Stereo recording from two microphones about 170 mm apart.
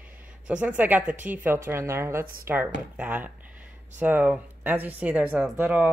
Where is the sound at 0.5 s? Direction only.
10° right (ahead or behind).